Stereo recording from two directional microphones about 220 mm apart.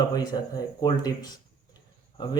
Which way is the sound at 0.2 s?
20° left (ahead or behind).